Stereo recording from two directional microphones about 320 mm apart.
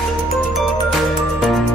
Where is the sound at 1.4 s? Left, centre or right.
Centre.